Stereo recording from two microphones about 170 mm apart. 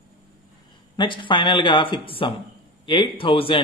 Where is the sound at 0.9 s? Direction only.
30° left (ahead or behind).